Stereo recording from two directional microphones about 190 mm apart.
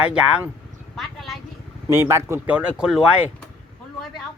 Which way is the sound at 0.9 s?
Centre (ahead or behind).